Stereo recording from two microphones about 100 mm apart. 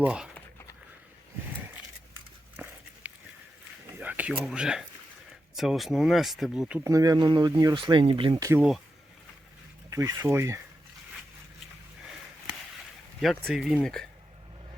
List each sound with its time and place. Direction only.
0.0 s speech: 10° right (ahead or behind)
2.6 s dog: 20° right (ahead or behind)
3.9 s a sound: 15° right (ahead or behind)
4.5 s speech: 5° right (ahead or behind)
6.8 s speech: 35° right (ahead or behind); by 8.4 s 60° right (ahead or behind)
9.9 s speech: 30° right (ahead or behind)
13.2 s speech: centre (ahead or behind)